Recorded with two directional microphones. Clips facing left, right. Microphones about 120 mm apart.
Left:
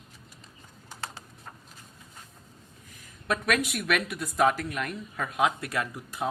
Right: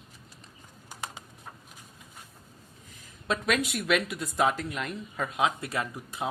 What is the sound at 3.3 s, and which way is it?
A woman's voice, 25° right (ahead or behind).